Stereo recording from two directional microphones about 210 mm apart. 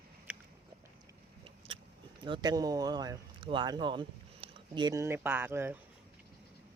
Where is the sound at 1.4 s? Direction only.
25° right (ahead or behind).